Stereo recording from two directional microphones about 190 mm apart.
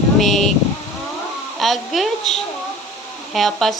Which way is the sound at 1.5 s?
Centre (ahead or behind).